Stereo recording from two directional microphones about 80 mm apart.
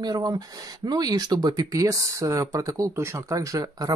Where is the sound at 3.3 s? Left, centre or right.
Right.